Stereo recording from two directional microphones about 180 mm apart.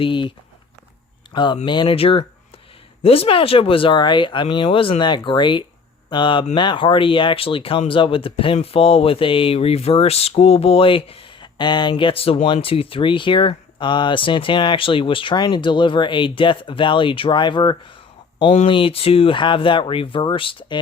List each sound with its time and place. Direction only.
0.0 s speech: 25° left (ahead or behind)